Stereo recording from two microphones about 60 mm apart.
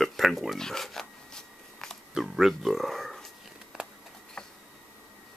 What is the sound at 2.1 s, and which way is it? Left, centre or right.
Speech, centre.